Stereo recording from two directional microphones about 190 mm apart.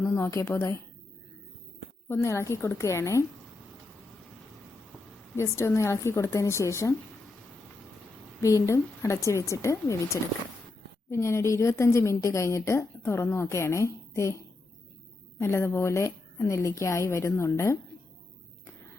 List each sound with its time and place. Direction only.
0.0 s a woman's voice: 15° left (ahead or behind)
2.0 s a woman's voice: 15° left (ahead or behind)
5.4 s a woman's voice: 15° left (ahead or behind)
8.4 s a woman's voice: 15° left (ahead or behind)